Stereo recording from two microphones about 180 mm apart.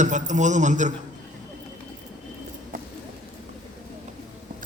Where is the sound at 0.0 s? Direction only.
40° right (ahead or behind).